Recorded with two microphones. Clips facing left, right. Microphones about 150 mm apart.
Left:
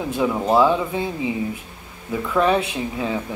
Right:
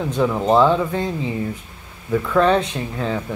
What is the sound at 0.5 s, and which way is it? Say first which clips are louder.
Speech: right 2 dB; 10° left (ahead or behind).